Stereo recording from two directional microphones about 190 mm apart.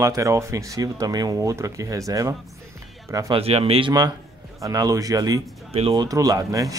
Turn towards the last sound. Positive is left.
turn(degrees=-20)  # may be behind; listen again after turning